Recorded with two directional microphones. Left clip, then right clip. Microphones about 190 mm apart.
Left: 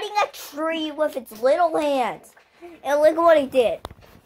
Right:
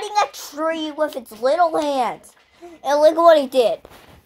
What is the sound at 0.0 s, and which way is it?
A woman's voice, 35° right (ahead or behind).